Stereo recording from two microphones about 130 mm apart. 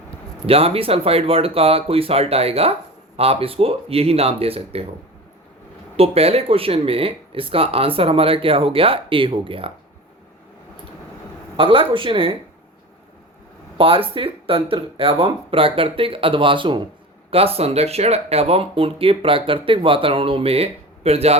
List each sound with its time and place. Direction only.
0.4 s speech: 50° right (ahead or behind)
6.0 s speech: 50° right (ahead or behind)
11.5 s speech: 45° right (ahead or behind)
13.7 s speech: 45° right (ahead or behind)
17.3 s speech: 50° right (ahead or behind)